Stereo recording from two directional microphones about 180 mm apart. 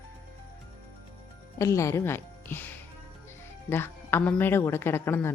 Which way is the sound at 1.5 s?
15° left (ahead or behind).